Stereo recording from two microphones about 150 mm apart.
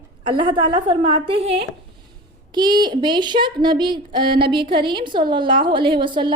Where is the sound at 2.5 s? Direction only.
30° right (ahead or behind).